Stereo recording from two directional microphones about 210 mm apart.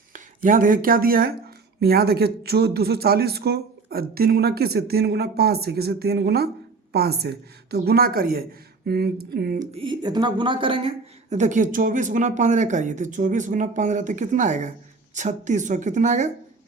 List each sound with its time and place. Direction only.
0.1 s speech: 40° right (ahead or behind)
9.6 s speech: 25° right (ahead or behind)